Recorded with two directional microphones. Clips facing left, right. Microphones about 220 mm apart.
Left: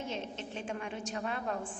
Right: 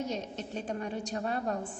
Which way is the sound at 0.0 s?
40° right (ahead or behind).